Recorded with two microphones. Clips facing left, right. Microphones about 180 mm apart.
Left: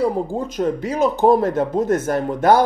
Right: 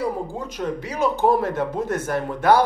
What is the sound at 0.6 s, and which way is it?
Speech, 45° left (ahead or behind).